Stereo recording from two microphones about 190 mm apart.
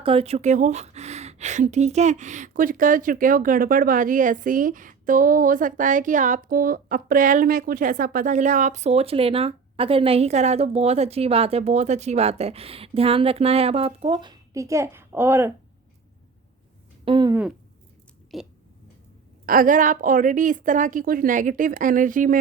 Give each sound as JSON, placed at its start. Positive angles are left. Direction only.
{"t": 0.0, "sound": "speech", "side_deg": -30}
{"t": 17.1, "sound": "speech", "side_deg": -25}
{"t": 18.3, "sound": "a sound", "side_deg": 0}
{"t": 19.5, "sound": "a woman's voice", "side_deg": -45}